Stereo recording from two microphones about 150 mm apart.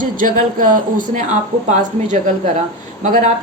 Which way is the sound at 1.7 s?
50° right (ahead or behind).